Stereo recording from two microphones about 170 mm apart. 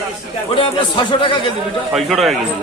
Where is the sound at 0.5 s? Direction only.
30° left (ahead or behind).